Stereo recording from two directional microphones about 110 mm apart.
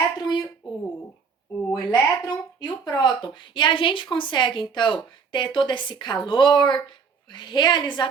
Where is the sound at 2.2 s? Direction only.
40° left (ahead or behind).